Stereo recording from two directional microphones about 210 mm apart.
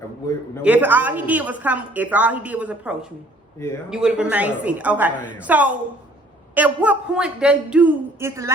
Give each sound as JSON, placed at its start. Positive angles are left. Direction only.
{"t": 0.6, "sound": "a woman's voice", "side_deg": -10}